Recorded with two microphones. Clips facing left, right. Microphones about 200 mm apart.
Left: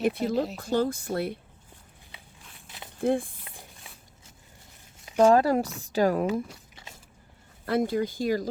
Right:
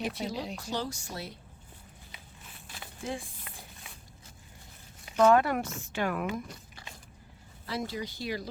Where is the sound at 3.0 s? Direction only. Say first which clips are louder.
Left 12 dB; 55° left (ahead or behind).